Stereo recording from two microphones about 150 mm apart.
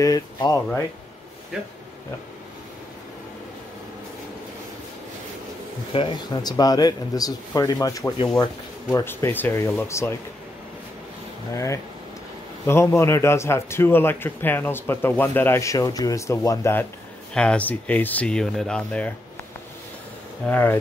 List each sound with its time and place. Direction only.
0.0 s speech: 25° left (ahead or behind)
5.9 s a man's voice: 30° left (ahead or behind)
11.5 s a man's voice: 20° left (ahead or behind)
17.3 s a man's voice: 5° left (ahead or behind)
20.4 s a man's voice: 10° left (ahead or behind)